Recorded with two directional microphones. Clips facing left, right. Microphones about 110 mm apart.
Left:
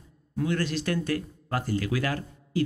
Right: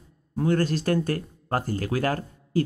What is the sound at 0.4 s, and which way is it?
Speech, 40° right (ahead or behind).